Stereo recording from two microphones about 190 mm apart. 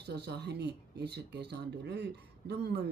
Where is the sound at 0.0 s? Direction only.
60° right (ahead or behind).